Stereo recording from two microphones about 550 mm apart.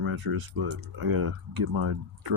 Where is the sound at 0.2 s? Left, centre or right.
Right.